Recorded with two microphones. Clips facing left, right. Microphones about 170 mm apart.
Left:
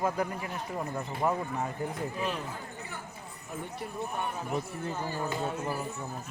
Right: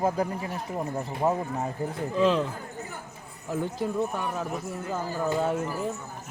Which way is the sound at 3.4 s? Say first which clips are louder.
Right 10 dB; 90° right.